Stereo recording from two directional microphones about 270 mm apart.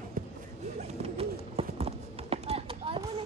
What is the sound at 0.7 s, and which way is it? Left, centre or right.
Clip-clop, right.